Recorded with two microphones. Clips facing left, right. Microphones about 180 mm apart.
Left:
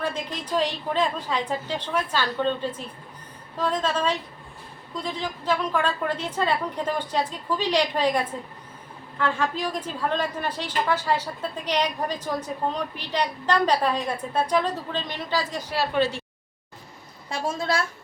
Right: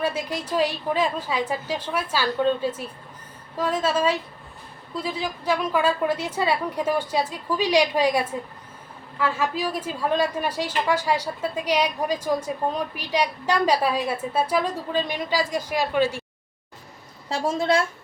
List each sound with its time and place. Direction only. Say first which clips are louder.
0.0 s a woman's voice: right 3 dB; 10° right (ahead or behind)
17.2 s a woman's voice: right 4 dB; 30° right (ahead or behind)